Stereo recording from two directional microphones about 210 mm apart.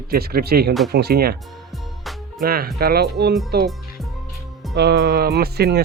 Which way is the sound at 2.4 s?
45° right (ahead or behind).